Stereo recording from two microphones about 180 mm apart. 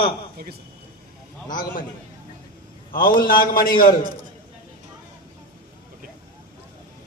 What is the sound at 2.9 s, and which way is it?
A man's voice, 50° left (ahead or behind).